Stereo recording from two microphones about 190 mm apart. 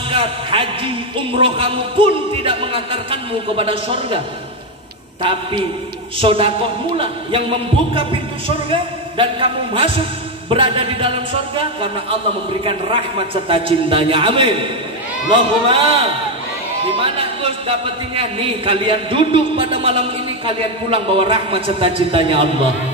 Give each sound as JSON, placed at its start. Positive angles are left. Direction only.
{"t": 0.1, "sound": "a man's voice", "side_deg": -30}
{"t": 5.2, "sound": "a man's voice", "side_deg": -25}
{"t": 17.0, "sound": "a man's voice", "side_deg": -30}